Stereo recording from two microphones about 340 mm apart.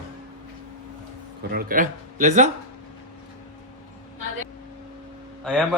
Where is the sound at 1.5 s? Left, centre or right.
Right.